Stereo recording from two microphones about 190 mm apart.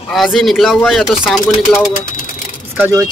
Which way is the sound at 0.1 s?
Centre (ahead or behind).